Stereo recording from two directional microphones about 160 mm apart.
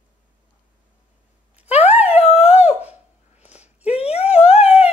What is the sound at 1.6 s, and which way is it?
Dog, 45° left (ahead or behind).